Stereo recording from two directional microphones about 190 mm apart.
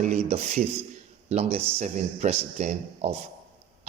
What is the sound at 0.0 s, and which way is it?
Speech, 35° right (ahead or behind).